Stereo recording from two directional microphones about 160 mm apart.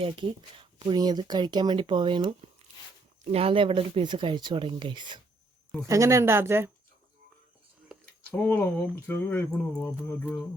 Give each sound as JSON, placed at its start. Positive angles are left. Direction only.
{"t": 0.0, "sound": "speech", "side_deg": -30}
{"t": 3.3, "sound": "speech", "side_deg": -35}
{"t": 5.9, "sound": "speech", "side_deg": -20}
{"t": 8.3, "sound": "speech", "side_deg": 10}